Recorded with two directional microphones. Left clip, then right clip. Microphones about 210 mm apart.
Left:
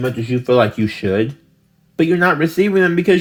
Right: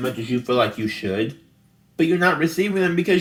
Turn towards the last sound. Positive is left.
turn(degrees=45)  # may be behind; listen again after turning